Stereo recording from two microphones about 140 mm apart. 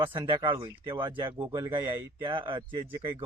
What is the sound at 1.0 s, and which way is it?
Speech, 35° right (ahead or behind).